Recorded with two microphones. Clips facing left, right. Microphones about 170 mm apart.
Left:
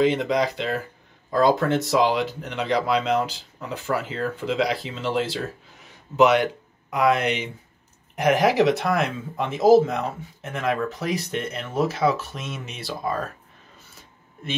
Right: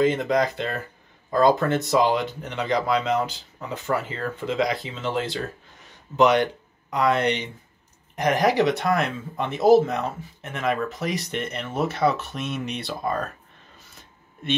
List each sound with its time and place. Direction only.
0.0 s speech: centre (ahead or behind)